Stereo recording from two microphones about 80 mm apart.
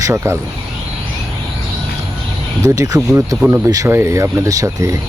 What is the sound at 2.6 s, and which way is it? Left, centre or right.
Speech, right.